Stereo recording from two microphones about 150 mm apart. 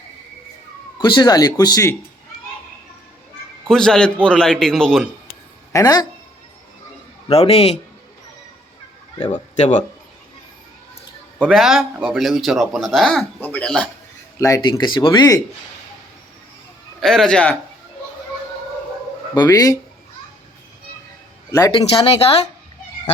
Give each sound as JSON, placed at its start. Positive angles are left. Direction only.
{"t": 1.0, "sound": "speech", "side_deg": 30}
{"t": 3.7, "sound": "a man's voice", "side_deg": 5}
{"t": 5.7, "sound": "speech", "side_deg": 25}
{"t": 7.3, "sound": "speech", "side_deg": 45}
{"t": 9.3, "sound": "speech", "side_deg": 50}
{"t": 11.4, "sound": "a man's voice", "side_deg": 0}
{"t": 14.3, "sound": "speech", "side_deg": 20}
{"t": 17.0, "sound": "a man's voice", "side_deg": 5}
{"t": 19.3, "sound": "speech", "side_deg": 25}
{"t": 21.5, "sound": "speech", "side_deg": 25}